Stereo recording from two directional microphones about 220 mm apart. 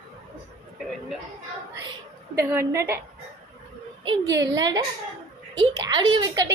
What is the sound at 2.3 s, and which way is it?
Speech, 10° right (ahead or behind).